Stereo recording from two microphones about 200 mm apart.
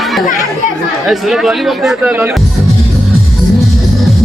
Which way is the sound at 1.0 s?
Centre (ahead or behind).